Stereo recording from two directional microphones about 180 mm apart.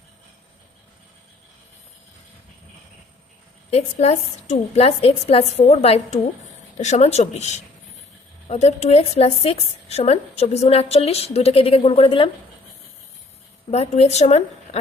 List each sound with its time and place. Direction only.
3.7 s a woman's voice: 35° left (ahead or behind)
13.7 s a woman's voice: 35° left (ahead or behind)